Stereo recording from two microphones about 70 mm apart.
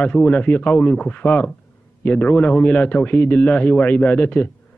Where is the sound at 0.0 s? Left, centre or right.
Left.